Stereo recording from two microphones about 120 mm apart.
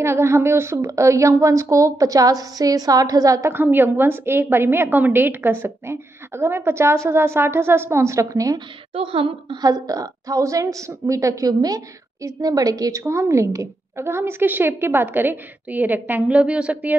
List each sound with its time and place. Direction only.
0.0 s a woman's voice: 20° right (ahead or behind)
8.9 s a woman's voice: 50° right (ahead or behind)
9.6 s a woman's voice: 35° right (ahead or behind); by 16.9 s 10° right (ahead or behind)